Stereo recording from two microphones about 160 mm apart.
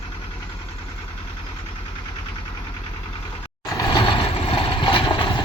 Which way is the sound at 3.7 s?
25° left (ahead or behind).